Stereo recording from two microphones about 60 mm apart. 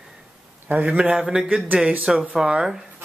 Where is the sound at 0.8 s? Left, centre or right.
Centre.